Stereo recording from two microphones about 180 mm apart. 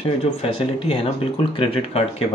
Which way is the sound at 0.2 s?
35° left (ahead or behind).